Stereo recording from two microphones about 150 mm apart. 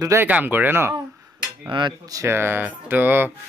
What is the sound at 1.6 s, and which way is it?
Speech, 30° right (ahead or behind).